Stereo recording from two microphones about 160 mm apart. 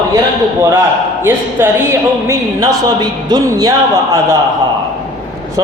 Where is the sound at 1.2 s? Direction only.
15° right (ahead or behind).